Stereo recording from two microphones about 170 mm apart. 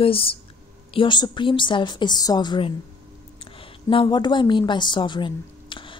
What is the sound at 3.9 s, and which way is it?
Speech, 30° left (ahead or behind).